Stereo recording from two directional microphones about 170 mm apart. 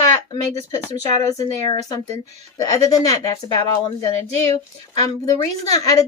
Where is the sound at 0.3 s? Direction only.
20° left (ahead or behind).